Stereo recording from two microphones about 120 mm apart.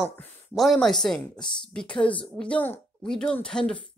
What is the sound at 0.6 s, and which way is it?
Speech, centre (ahead or behind).